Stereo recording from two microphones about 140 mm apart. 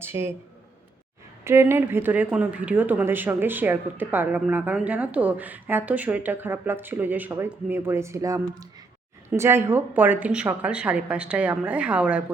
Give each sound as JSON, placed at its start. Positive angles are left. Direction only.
{"t": 0.0, "sound": "speech", "side_deg": -15}
{"t": 1.5, "sound": "speech", "side_deg": -20}